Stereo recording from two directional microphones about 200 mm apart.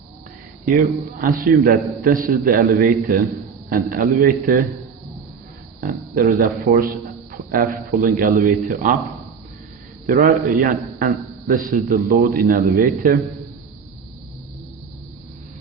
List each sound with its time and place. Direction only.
1.2 s a man's voice: 45° right (ahead or behind)
5.8 s a man's voice: 45° right (ahead or behind)
10.1 s a man's voice: 45° right (ahead or behind)